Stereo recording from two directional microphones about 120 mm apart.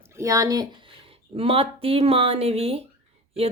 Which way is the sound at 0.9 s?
50° right (ahead or behind).